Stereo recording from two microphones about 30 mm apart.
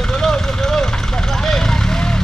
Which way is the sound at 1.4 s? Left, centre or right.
Centre.